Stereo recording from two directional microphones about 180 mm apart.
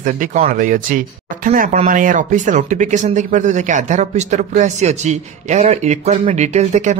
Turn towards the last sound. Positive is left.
turn(degrees=-40)  # may be behind; listen again after turning